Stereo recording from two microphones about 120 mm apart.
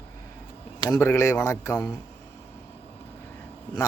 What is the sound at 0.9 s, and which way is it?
Speech, 20° left (ahead or behind).